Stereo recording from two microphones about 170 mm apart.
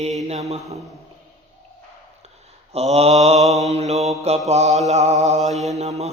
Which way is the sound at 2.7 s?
40° right (ahead or behind).